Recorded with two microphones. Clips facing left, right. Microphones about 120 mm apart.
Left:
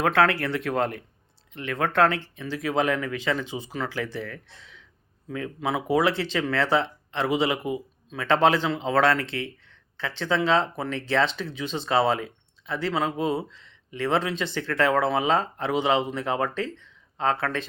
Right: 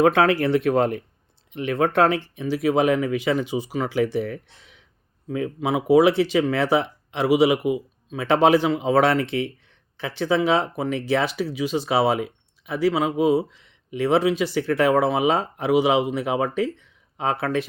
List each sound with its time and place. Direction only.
0.0 s speech: 20° right (ahead or behind)